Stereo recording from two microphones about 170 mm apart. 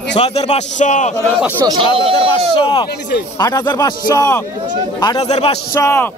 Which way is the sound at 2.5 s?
30° left (ahead or behind).